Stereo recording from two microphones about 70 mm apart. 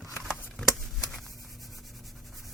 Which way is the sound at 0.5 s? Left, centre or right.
Centre.